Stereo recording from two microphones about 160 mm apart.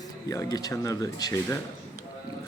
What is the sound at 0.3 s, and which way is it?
Speech, 20° left (ahead or behind).